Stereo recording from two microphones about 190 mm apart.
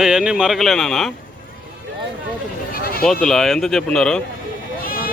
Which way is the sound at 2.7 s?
50° left (ahead or behind).